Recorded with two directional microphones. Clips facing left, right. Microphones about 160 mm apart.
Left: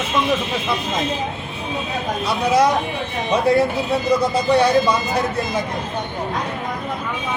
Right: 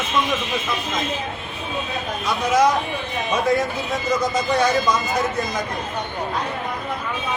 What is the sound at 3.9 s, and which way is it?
Speech, 30° left (ahead or behind).